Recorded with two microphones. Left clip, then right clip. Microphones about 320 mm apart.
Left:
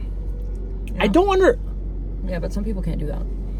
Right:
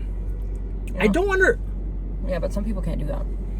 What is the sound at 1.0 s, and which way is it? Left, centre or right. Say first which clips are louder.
Speech: left 3 dB; centre.